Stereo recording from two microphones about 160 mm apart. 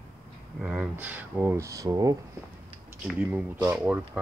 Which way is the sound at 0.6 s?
5° right (ahead or behind).